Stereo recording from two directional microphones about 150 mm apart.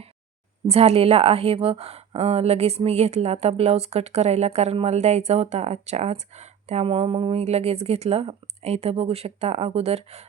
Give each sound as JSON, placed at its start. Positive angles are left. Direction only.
{"t": 0.7, "sound": "a woman's voice", "side_deg": -45}